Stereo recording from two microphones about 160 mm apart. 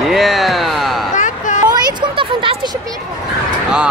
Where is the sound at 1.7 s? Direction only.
30° right (ahead or behind).